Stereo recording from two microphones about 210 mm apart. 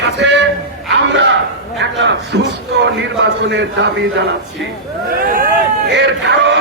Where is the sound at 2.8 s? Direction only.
55° right (ahead or behind).